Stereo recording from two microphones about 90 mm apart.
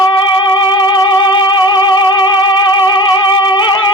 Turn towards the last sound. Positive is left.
turn(degrees=60)  # may be behind; listen again after turning